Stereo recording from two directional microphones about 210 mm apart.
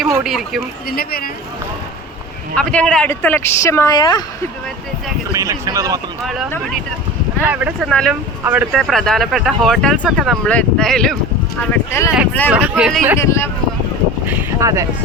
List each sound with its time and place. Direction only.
0.2 s speech: centre (ahead or behind)
0.9 s speech: 45° left (ahead or behind)
2.6 s speech: 5° left (ahead or behind)
5.3 s speech: 15° right (ahead or behind)
6.2 s speech: centre (ahead or behind)
12.5 s speech: 5° right (ahead or behind)
13.1 s speech: 15° left (ahead or behind)
14.3 s speech: 15° right (ahead or behind)